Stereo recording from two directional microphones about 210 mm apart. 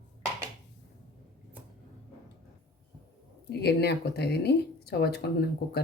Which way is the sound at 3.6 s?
50° left (ahead or behind).